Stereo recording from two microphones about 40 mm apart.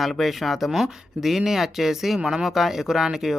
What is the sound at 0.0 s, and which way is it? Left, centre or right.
Speech, centre.